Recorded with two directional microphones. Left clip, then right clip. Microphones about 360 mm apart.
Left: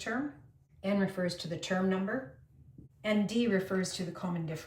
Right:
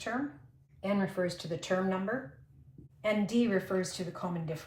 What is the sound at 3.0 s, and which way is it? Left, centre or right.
A woman's voice, centre.